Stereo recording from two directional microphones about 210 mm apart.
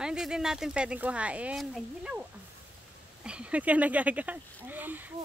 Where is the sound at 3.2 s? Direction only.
5° right (ahead or behind).